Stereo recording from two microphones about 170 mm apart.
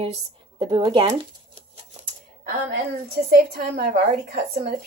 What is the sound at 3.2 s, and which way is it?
A woman's voice, 70° right (ahead or behind).